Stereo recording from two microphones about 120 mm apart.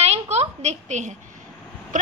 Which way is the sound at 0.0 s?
60° right (ahead or behind).